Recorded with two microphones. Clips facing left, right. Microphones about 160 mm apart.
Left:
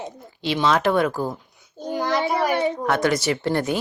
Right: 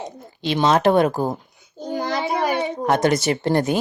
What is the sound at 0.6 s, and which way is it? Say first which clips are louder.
Speech: right 4 dB; 25° right (ahead or behind).